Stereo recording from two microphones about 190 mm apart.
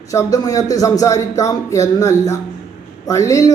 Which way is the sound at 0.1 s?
20° left (ahead or behind).